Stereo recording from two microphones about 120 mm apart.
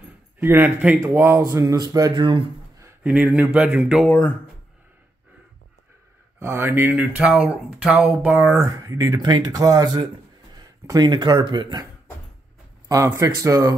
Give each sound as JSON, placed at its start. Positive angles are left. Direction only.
{"t": 0.4, "sound": "speech", "side_deg": -20}
{"t": 1.4, "sound": "speech", "side_deg": -30}
{"t": 3.0, "sound": "speech", "side_deg": -15}
{"t": 6.4, "sound": "speech", "side_deg": -20}
{"t": 8.5, "sound": "speech", "side_deg": -25}
{"t": 12.8, "sound": "speech", "side_deg": -25}